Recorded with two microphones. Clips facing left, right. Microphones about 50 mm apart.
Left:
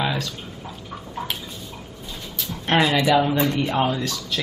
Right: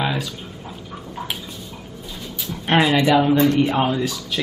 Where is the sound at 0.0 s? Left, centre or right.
Centre.